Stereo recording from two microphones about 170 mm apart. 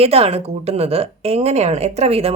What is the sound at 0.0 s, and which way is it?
A woman's voice, 35° right (ahead or behind).